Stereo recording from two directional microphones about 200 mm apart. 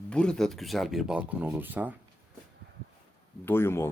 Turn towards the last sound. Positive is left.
turn(degrees=10)  # may be behind; listen again after turning